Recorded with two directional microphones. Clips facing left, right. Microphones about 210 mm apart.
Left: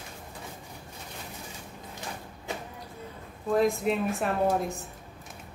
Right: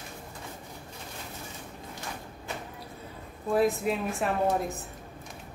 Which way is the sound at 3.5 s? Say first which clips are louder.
Left 1 dB; centre (ahead or behind).